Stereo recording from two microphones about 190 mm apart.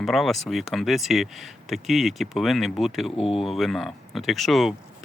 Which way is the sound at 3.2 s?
30° left (ahead or behind).